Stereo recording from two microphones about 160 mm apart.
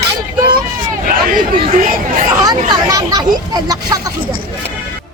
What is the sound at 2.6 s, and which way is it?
Speech, 25° right (ahead or behind).